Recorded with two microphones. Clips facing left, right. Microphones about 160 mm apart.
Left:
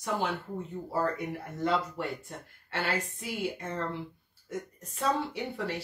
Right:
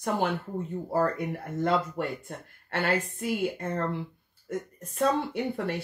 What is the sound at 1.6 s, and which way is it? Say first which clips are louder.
Speech: right 3 dB; 55° right (ahead or behind).